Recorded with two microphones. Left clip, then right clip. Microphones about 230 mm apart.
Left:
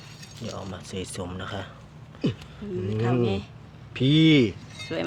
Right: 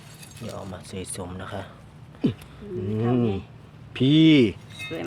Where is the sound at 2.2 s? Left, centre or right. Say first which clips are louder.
Right 2 dB; right.